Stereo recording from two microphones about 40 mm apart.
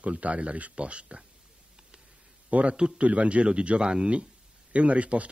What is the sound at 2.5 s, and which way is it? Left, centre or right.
A man's voice, right.